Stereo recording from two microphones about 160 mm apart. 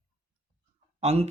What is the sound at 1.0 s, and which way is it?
Speech, 40° right (ahead or behind).